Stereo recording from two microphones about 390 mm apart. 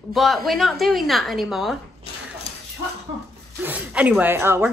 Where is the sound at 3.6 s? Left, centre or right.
Centre.